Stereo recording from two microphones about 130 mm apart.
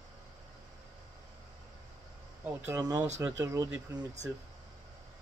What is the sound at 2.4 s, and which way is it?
Speech, 15° right (ahead or behind).